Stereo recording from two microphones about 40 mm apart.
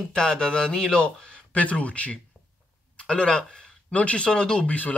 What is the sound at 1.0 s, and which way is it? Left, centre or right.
Speech, left.